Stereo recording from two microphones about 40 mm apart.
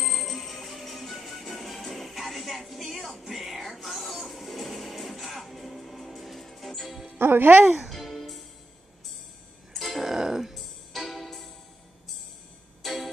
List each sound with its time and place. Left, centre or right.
0.0 s music: centre
7.2 s speech: right
7.6 s music: centre
9.8 s a sound: centre
10.0 s music: centre
10.5 s music: centre
12.8 s music: centre